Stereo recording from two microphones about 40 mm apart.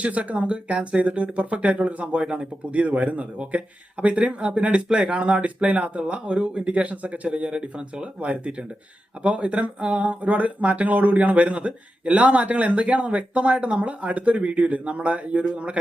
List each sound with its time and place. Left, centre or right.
0.0 s speech: right
2.2 s speech: right
2.7 s speech: right